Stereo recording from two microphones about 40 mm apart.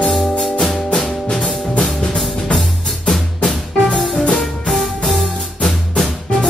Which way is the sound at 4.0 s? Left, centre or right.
Centre.